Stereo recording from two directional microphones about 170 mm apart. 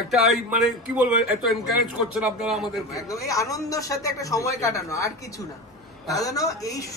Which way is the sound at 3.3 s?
20° left (ahead or behind).